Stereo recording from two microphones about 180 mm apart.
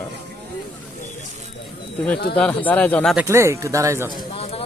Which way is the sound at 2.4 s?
10° left (ahead or behind).